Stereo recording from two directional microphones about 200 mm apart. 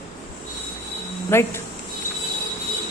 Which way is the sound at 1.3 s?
10° left (ahead or behind).